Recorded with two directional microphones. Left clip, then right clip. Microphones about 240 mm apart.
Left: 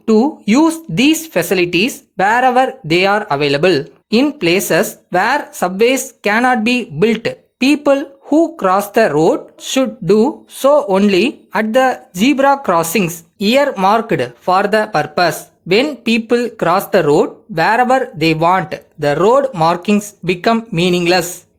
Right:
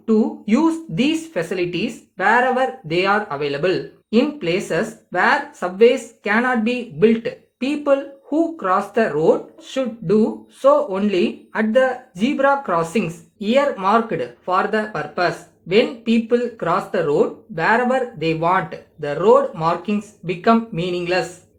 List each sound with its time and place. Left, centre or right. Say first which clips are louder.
0.0 s a woman's voice: left 6 dB; left